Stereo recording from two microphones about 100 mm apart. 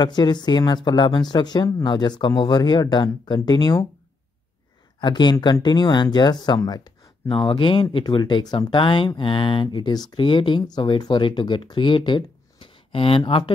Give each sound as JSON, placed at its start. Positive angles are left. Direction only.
{"t": 0.0, "sound": "speech", "side_deg": 45}
{"t": 5.0, "sound": "speech", "side_deg": 50}
{"t": 7.2, "sound": "speech", "side_deg": 60}